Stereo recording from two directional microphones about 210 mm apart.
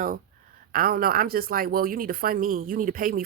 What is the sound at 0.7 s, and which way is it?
Speech, 45° right (ahead or behind).